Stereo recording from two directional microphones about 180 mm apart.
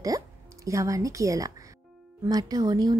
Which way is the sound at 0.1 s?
20° right (ahead or behind).